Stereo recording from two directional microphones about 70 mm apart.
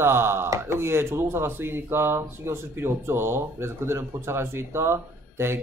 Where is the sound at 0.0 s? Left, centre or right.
Right.